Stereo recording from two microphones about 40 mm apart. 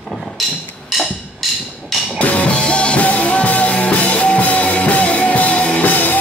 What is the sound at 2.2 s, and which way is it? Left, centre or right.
Music, left.